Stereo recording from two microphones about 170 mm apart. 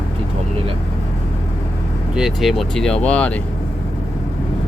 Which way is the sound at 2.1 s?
Centre (ahead or behind).